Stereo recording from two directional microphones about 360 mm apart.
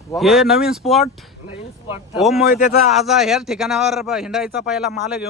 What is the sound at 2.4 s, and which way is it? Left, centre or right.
Speech, left.